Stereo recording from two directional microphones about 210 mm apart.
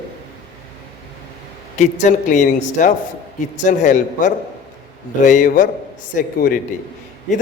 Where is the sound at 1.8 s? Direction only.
35° left (ahead or behind).